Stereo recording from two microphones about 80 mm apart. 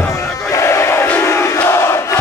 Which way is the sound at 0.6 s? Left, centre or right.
Left.